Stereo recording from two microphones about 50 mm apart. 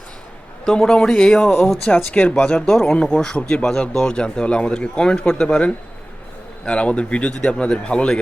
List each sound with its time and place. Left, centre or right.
0.6 s speech: centre